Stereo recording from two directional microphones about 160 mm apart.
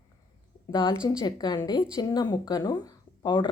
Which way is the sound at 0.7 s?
30° left (ahead or behind).